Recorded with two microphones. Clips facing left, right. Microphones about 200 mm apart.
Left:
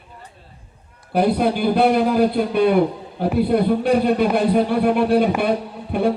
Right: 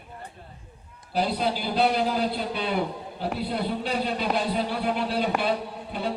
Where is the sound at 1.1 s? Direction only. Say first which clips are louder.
Left 8 dB; 55° left (ahead or behind).